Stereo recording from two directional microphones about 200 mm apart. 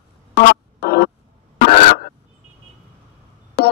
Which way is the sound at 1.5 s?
40° left (ahead or behind).